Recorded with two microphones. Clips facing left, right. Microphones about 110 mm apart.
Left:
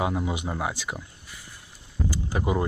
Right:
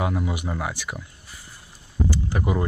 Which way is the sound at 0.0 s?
20° left (ahead or behind).